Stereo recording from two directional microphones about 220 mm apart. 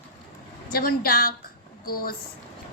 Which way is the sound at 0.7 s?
45° left (ahead or behind).